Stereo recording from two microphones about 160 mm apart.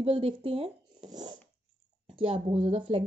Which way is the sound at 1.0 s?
25° right (ahead or behind).